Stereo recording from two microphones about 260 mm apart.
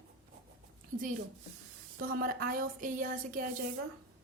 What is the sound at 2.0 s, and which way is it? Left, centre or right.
Speech, right.